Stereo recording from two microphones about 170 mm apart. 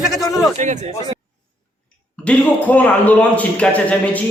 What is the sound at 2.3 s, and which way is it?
A man's voice, 10° left (ahead or behind).